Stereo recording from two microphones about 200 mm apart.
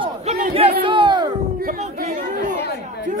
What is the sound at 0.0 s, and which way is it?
Crowd, 30° right (ahead or behind).